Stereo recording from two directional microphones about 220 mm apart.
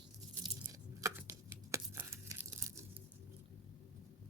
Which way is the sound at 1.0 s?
15° right (ahead or behind).